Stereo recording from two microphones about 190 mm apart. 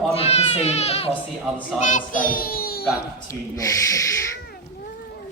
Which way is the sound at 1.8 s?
45° left (ahead or behind).